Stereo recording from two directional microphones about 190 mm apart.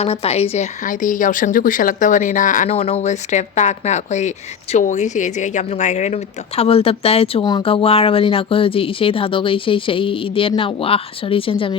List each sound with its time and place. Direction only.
0.0 s a woman's voice: 30° left (ahead or behind)